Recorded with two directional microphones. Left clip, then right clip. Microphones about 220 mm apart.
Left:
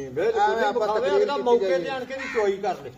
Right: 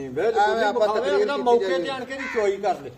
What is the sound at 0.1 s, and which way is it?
A man's voice, 55° right (ahead or behind).